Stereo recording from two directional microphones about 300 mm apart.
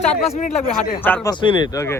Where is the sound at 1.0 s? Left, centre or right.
Centre.